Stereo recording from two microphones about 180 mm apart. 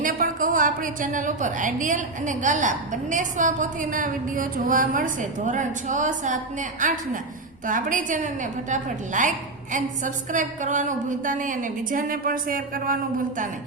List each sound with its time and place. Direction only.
0.0 s a woman's voice: 50° right (ahead or behind)